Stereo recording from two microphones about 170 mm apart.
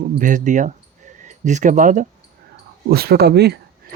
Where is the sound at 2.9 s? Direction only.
65° right (ahead or behind).